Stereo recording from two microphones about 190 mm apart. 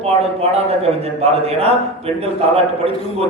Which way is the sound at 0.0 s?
35° right (ahead or behind).